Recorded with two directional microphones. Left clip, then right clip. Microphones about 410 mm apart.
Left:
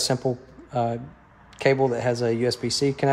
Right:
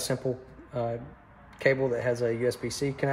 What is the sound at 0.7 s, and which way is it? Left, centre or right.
Speech, left.